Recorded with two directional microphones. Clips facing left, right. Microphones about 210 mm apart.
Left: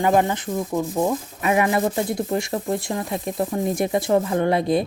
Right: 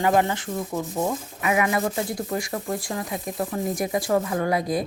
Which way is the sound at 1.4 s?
30° left (ahead or behind).